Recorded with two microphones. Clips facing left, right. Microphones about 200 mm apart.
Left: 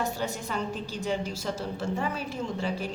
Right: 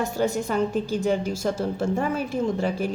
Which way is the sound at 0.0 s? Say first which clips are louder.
Right 7 dB; 45° right (ahead or behind).